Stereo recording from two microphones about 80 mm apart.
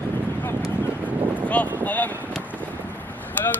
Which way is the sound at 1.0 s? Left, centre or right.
Right.